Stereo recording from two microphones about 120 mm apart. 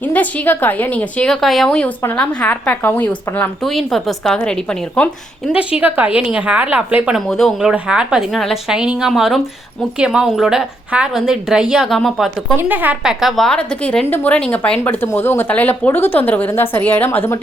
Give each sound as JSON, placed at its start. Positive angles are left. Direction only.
{"t": 0.0, "sound": "speech", "side_deg": 15}
{"t": 3.6, "sound": "a woman's voice", "side_deg": 0}
{"t": 5.5, "sound": "a woman's voice", "side_deg": -10}
{"t": 7.3, "sound": "a woman's voice", "side_deg": 0}
{"t": 12.5, "sound": "a woman's voice", "side_deg": -15}